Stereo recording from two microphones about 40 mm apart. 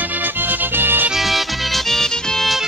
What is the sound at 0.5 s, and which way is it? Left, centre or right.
Music, right.